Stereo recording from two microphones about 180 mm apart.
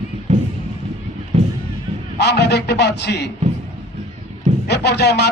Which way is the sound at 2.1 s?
70° left (ahead or behind).